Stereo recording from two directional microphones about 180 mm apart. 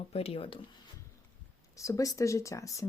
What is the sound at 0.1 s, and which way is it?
Speech, 35° left (ahead or behind).